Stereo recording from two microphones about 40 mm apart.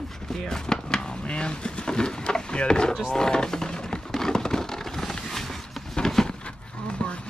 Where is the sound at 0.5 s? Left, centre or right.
Centre.